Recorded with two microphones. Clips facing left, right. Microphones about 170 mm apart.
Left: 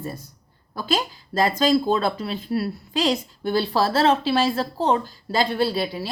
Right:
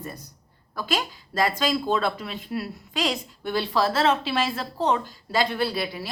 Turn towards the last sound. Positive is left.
turn(degrees=30)  # may be behind; listen again after turning